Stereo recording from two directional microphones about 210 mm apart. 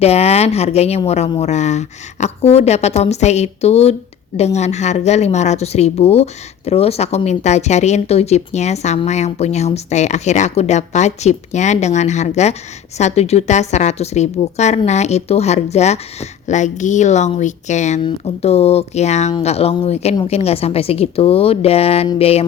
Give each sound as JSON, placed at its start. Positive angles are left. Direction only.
{"t": 0.0, "sound": "a woman's voice", "side_deg": 30}